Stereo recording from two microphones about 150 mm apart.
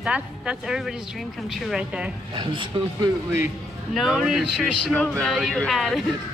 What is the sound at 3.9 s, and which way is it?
A woman's voice, 5° right (ahead or behind).